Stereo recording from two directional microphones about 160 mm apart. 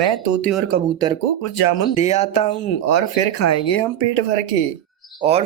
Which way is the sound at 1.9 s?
45° left (ahead or behind).